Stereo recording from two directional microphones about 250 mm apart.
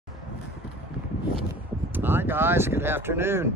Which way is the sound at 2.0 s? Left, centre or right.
Centre.